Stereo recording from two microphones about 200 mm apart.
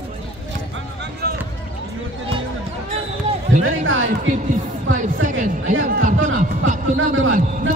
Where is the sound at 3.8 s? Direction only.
75° right (ahead or behind).